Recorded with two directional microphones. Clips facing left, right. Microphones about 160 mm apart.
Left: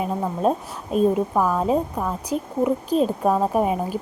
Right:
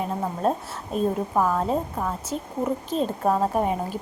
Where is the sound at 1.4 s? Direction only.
5° left (ahead or behind).